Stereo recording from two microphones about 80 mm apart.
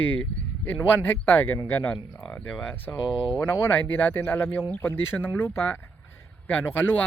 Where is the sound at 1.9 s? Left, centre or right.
Centre.